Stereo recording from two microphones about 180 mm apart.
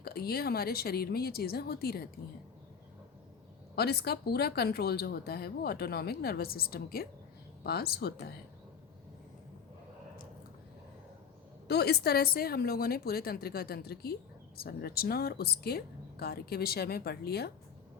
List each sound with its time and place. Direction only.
0.0 s a woman's voice: 60° left (ahead or behind)
3.8 s a woman's voice: 60° left (ahead or behind)
11.7 s a woman's voice: 65° left (ahead or behind)